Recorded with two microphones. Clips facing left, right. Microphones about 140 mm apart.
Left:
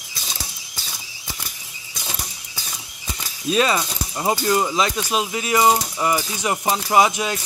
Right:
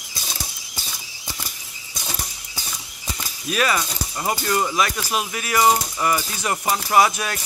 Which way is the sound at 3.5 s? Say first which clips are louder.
Left 3 dB; 25° left (ahead or behind).